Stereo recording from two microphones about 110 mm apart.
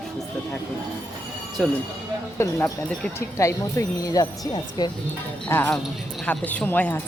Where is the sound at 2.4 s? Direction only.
25° left (ahead or behind); by 4.9 s 40° left (ahead or behind).